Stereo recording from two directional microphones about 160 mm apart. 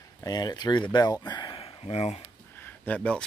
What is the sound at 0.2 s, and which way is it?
Speech, 25° left (ahead or behind).